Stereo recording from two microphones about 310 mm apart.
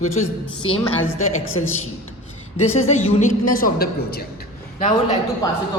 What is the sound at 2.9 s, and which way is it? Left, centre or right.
A woman's voice, left.